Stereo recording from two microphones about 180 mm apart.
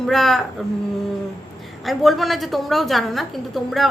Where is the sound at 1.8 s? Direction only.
Centre (ahead or behind).